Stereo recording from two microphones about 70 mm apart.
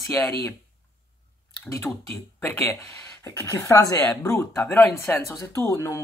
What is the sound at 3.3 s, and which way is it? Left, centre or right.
Speech, left.